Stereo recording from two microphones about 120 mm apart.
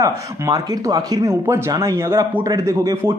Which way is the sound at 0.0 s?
30° right (ahead or behind).